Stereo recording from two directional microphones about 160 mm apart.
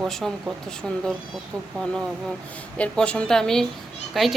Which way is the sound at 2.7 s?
5° left (ahead or behind).